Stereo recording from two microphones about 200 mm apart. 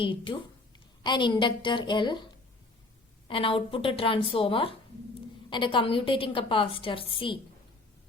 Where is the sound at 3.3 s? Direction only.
25° left (ahead or behind).